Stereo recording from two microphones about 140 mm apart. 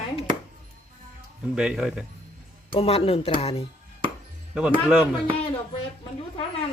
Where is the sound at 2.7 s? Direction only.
45° left (ahead or behind).